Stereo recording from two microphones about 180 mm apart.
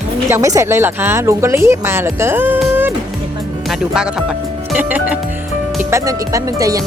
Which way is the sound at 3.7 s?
5° right (ahead or behind).